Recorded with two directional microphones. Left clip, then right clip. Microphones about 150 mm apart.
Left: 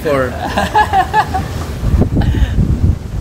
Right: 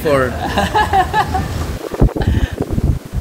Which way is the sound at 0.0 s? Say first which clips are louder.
Even; 90° right.